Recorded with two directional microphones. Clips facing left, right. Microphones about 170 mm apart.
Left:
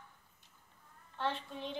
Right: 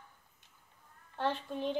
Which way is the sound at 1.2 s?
45° right (ahead or behind).